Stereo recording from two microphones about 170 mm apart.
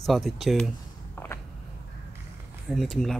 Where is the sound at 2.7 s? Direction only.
Centre (ahead or behind).